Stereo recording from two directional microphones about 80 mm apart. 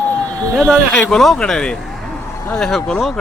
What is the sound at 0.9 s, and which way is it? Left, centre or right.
Speech, centre.